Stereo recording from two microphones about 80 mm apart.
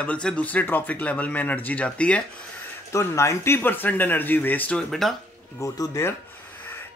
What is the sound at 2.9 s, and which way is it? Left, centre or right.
Speech, left.